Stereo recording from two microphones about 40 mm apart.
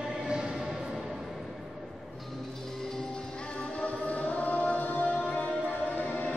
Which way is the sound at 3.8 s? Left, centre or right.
Left.